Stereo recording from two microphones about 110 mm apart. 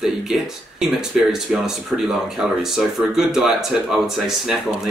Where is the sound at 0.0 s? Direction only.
5° right (ahead or behind).